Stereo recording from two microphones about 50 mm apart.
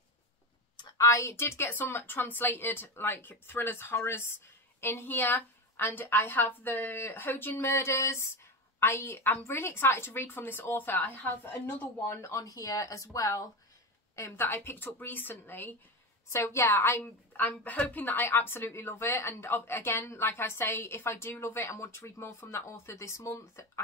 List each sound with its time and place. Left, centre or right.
0.9 s speech: left
7.7 s a woman's voice: left
8.7 s a woman's voice: left
12.1 s speech: left
12.9 s speech: left
14.1 s speech: left
16.3 s a woman's voice: left
17.3 s speech: left